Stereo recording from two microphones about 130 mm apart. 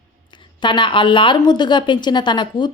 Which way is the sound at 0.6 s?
40° left (ahead or behind).